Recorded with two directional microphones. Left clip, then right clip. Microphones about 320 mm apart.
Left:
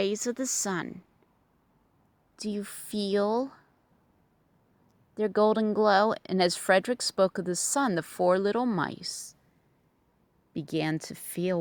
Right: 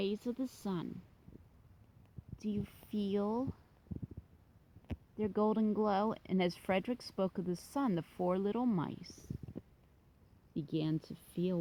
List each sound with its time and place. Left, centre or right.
0.0 s speech: left
2.5 s speech: left
3.2 s speech: left
5.1 s speech: left
10.5 s speech: left